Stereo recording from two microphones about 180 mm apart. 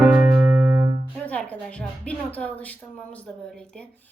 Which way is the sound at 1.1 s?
5° left (ahead or behind).